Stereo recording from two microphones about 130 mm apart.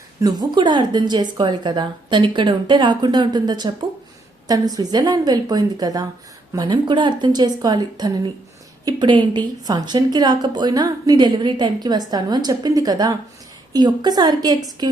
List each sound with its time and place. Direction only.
0.2 s a woman's voice: 30° right (ahead or behind)